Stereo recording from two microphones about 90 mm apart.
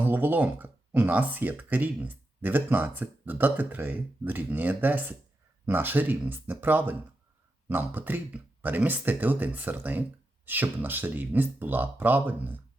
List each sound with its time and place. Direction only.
0.0 s speech: 20° right (ahead or behind)